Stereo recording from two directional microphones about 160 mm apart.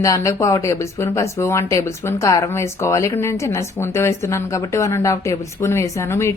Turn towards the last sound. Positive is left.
turn(degrees=15)  # may be behind; listen again after turning